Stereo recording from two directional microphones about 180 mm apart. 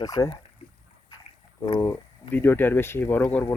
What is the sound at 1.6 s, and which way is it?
Speech, 20° left (ahead or behind).